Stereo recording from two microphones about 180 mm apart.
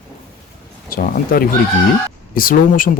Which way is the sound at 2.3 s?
50° left (ahead or behind).